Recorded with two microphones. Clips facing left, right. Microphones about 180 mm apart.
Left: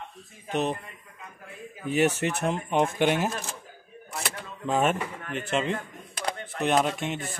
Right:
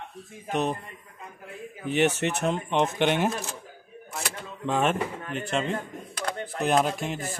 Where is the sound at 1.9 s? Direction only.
35° left (ahead or behind).